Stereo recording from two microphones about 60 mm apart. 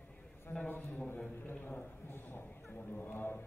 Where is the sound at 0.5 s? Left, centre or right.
Left.